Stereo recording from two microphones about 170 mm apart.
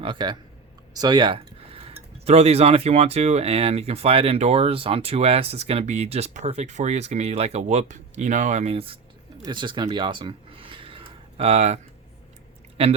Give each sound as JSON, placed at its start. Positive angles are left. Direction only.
{"t": 0.0, "sound": "speech", "side_deg": -30}
{"t": 12.8, "sound": "speech", "side_deg": -35}